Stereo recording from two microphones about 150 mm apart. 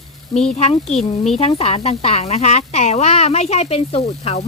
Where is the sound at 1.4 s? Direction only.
45° left (ahead or behind).